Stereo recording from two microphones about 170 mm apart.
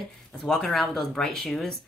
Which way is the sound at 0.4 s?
Centre (ahead or behind).